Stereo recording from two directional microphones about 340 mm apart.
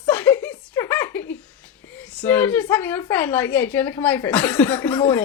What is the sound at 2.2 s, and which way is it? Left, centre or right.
A woman's voice, centre.